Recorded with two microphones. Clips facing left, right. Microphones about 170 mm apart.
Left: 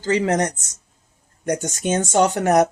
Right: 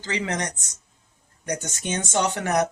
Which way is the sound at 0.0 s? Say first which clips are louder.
Left 9 dB; 45° left (ahead or behind).